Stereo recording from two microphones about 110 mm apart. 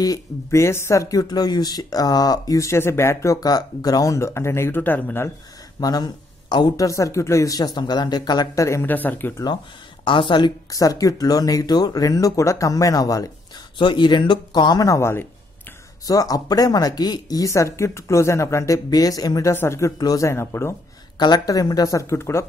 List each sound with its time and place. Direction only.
0.0 s speech: 30° left (ahead or behind)
5.8 s speech: 35° left (ahead or behind)
6.9 s speech: 30° left (ahead or behind)
10.0 s speech: 50° left (ahead or behind)
10.7 s speech: 30° left (ahead or behind)
13.7 s speech: 45° left (ahead or behind); by 15.2 s 25° left (ahead or behind)
16.1 s speech: 35° left (ahead or behind)
17.5 s speech: 25° left (ahead or behind)
19.5 s speech: 25° left (ahead or behind)
21.2 s speech: 40° left (ahead or behind)